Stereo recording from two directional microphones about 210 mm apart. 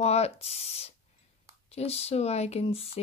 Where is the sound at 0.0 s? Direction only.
30° left (ahead or behind).